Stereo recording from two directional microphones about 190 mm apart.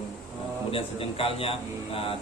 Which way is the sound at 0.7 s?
30° left (ahead or behind).